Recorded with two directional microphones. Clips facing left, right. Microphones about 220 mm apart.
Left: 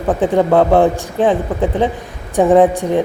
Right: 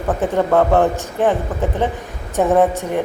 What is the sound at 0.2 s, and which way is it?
Speech, 15° left (ahead or behind).